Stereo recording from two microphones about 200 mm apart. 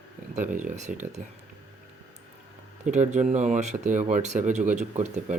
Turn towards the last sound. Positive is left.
turn(degrees=-35)  # may be behind; listen again after turning